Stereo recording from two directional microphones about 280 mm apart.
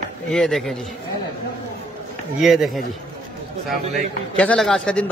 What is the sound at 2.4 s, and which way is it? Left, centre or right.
Speech, centre.